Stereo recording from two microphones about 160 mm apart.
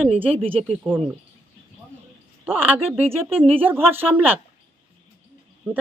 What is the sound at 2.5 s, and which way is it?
A woman's voice, 10° right (ahead or behind).